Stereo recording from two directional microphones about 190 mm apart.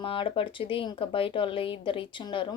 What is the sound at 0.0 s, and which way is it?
A woman's voice, 25° left (ahead or behind).